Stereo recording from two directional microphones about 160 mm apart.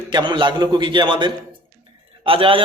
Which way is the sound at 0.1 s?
30° right (ahead or behind).